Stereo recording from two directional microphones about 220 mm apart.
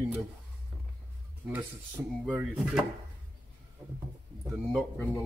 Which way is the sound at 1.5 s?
10° right (ahead or behind).